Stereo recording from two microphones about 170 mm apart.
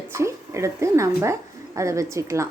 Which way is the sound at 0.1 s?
15° right (ahead or behind).